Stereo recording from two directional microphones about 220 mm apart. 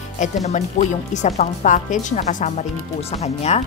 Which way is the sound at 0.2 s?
35° left (ahead or behind).